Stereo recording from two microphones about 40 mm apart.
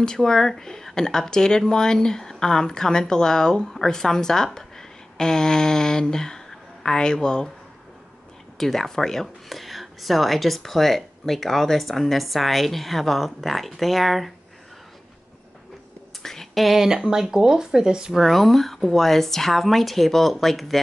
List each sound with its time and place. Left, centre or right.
0.0 s speech: centre
4.6 s a sound: centre
8.5 s speech: centre
9.5 s speech: centre
16.2 s whispering: centre
16.5 s speech: centre
16.8 s speech: centre
18.1 s speech: centre